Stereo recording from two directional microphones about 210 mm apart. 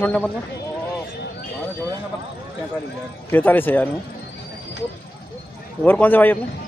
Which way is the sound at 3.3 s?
10° left (ahead or behind).